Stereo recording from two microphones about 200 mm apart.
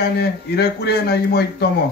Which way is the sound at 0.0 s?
55° left (ahead or behind).